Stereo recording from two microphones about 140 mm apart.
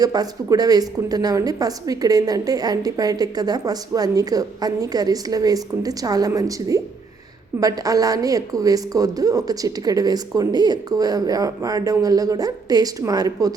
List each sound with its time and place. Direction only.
0.0 s a woman's voice: 30° right (ahead or behind)